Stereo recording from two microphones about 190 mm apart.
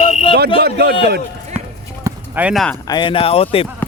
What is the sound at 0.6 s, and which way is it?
Speech, 55° right (ahead or behind).